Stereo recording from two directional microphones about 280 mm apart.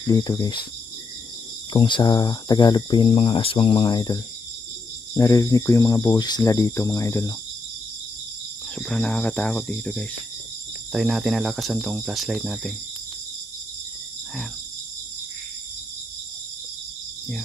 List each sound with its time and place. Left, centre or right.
0.1 s speech: centre
1.7 s speech: centre
8.7 s speech: centre